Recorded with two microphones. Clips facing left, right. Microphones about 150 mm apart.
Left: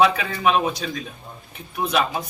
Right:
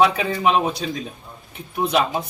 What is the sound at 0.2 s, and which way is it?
A man's voice, 25° right (ahead or behind).